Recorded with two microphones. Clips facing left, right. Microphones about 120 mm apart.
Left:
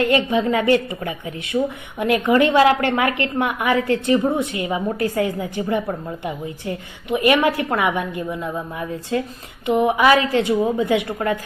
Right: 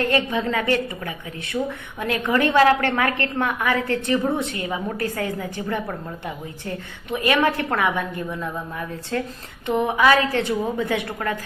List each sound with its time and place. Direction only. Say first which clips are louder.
0.0 s a woman's voice: left 4 dB; 15° left (ahead or behind)